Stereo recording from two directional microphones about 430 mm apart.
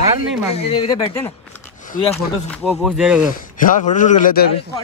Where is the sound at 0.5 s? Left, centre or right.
Centre.